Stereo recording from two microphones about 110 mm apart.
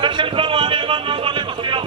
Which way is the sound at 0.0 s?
50° right (ahead or behind).